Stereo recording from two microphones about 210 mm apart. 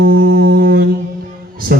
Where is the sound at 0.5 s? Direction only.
50° right (ahead or behind).